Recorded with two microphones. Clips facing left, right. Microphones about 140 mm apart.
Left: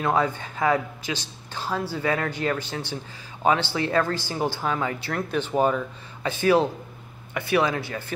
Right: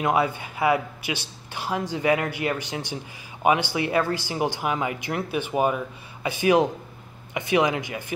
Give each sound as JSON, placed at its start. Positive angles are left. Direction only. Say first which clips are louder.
{"t": 0.0, "sound": "speech", "louder": "right 1 dB", "side_deg": -10}